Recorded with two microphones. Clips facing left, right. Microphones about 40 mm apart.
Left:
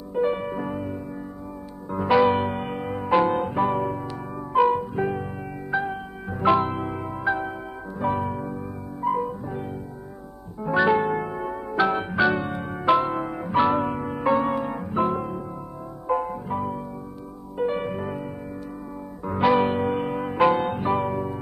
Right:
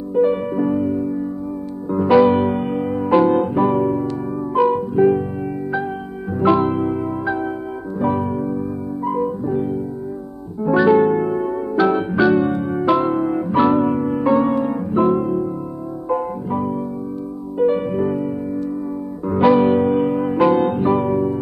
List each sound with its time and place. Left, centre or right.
0.1 s music: centre
11.7 s electric piano: centre
12.6 s music: centre